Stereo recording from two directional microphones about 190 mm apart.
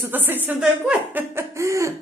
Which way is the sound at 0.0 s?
10° right (ahead or behind).